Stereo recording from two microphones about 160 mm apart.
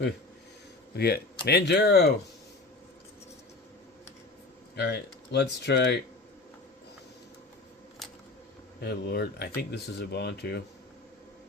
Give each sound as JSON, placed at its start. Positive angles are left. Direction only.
{"t": 0.9, "sound": "speech", "side_deg": 85}
{"t": 4.8, "sound": "speech", "side_deg": 90}
{"t": 8.8, "sound": "speech", "side_deg": 90}